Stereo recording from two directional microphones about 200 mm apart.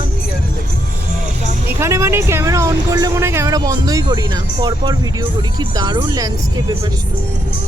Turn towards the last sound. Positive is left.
turn(degrees=-20)  # may be behind; listen again after turning